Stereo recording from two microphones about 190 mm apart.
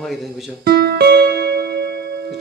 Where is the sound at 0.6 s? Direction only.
60° right (ahead or behind).